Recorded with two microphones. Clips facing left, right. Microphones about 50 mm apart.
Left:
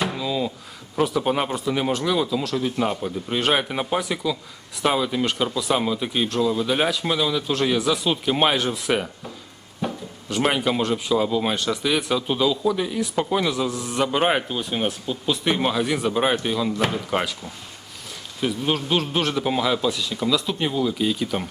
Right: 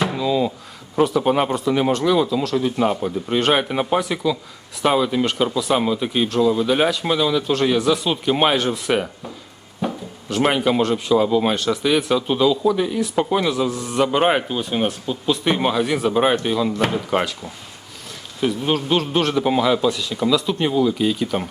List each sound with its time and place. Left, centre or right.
0.0 s drawer open or close: centre
0.9 s speech: centre